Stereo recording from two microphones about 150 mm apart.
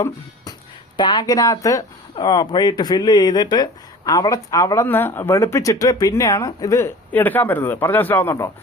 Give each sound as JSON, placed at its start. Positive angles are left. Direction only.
{"t": 0.9, "sound": "speech", "side_deg": 30}